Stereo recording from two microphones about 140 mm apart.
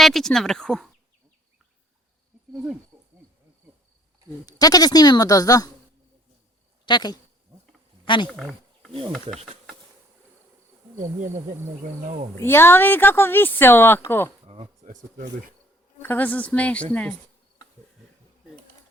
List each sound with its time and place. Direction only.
0.0 s speech: centre (ahead or behind)
4.4 s speech: 25° left (ahead or behind)
6.8 s speech: 30° left (ahead or behind)
8.3 s wild animals: centre (ahead or behind)
8.9 s speech: 40° right (ahead or behind)
10.9 s insect: 65° right (ahead or behind)
12.4 s speech: 15° left (ahead or behind)
14.4 s a sound: 40° right (ahead or behind)
16.0 s speech: 15° left (ahead or behind)